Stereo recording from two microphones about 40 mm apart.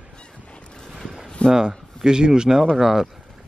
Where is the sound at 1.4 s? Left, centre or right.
Left.